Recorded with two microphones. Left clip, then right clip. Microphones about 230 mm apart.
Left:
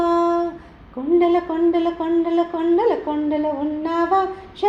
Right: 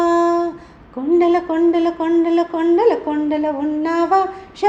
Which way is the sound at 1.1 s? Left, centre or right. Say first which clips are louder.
Right 2 dB; right.